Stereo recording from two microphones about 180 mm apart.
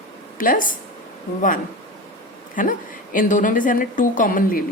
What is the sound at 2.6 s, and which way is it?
A woman's voice, 50° left (ahead or behind).